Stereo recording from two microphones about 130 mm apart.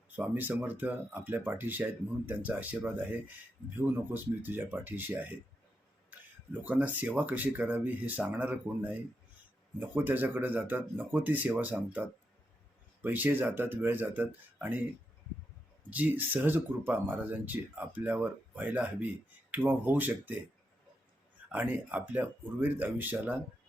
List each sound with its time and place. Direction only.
0.2 s speech: 15° right (ahead or behind)
15.9 s speech: 10° right (ahead or behind)
21.5 s speech: 15° right (ahead or behind)